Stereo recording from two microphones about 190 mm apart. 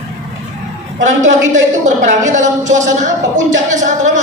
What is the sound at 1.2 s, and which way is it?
A woman's voice, 40° right (ahead or behind).